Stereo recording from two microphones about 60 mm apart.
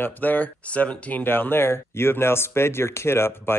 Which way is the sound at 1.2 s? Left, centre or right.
Left.